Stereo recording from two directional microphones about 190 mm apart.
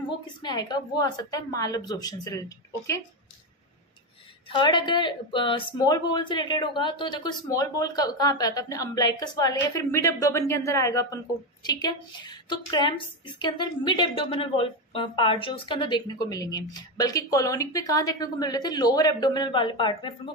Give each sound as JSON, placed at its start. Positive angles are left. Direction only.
{"t": 0.4, "sound": "a woman's voice", "side_deg": 20}
{"t": 4.5, "sound": "a woman's voice", "side_deg": 25}